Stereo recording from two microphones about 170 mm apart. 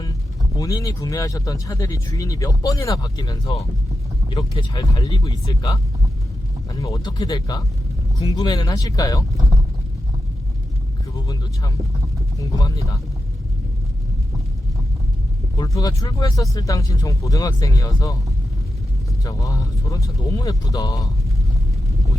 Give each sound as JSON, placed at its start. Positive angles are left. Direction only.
{"t": 0.0, "sound": "speech", "side_deg": 20}
{"t": 12.4, "sound": "speech", "side_deg": 20}
{"t": 15.5, "sound": "speech", "side_deg": 20}
{"t": 19.2, "sound": "speech", "side_deg": 20}